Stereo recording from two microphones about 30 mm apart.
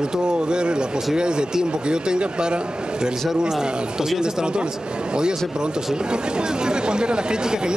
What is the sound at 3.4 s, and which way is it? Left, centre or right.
Speech, centre.